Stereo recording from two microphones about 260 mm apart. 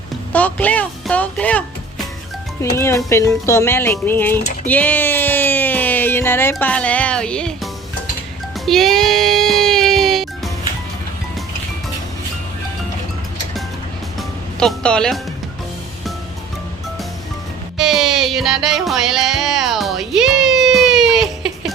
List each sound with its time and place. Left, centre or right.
0.3 s speech: centre
8.6 s music: centre
14.2 s music: centre
17.7 s music: centre